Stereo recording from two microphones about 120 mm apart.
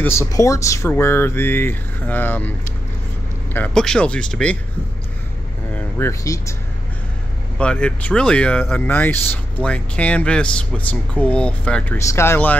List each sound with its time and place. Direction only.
0.0 s speech: 20° left (ahead or behind)
3.5 s speech: 10° left (ahead or behind)
5.8 s speech: 20° left (ahead or behind)
7.5 s speech: 10° left (ahead or behind)
12.1 s speech: 20° left (ahead or behind)